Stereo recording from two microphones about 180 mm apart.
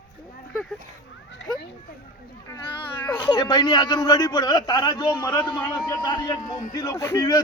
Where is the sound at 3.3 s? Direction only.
25° left (ahead or behind).